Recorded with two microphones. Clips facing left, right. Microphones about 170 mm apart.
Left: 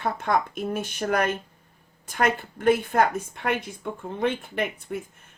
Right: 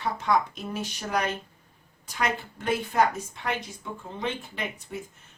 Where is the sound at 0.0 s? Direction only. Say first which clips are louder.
Left 1 dB; 55° left (ahead or behind).